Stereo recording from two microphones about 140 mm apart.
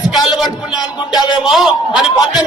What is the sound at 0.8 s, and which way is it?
Music, 30° left (ahead or behind).